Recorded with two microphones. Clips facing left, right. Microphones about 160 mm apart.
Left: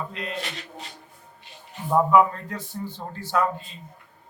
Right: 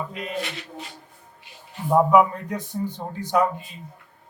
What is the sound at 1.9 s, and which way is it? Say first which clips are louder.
A man's voice: right 2 dB; 15° right (ahead or behind).